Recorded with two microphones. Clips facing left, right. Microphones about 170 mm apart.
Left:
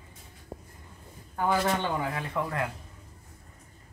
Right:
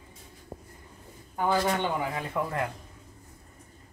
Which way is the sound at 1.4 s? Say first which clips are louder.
Right 1 dB; 15° right (ahead or behind).